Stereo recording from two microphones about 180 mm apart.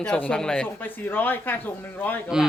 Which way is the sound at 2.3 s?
5° right (ahead or behind).